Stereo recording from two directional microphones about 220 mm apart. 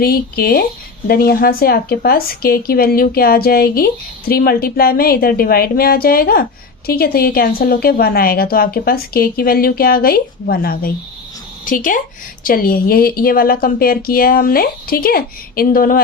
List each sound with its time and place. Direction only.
0.0 s a woman's voice: 45° left (ahead or behind)